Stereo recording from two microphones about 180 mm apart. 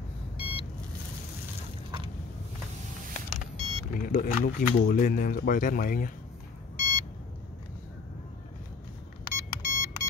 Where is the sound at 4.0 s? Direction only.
50° left (ahead or behind).